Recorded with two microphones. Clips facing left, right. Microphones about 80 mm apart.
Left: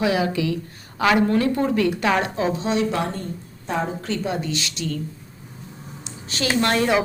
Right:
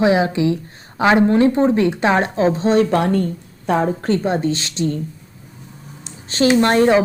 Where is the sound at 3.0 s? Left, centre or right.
Right.